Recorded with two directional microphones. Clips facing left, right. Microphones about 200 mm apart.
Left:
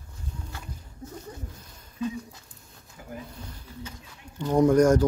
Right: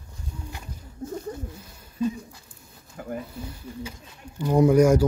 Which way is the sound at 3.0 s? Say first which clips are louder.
Right 9 dB; 55° right (ahead or behind).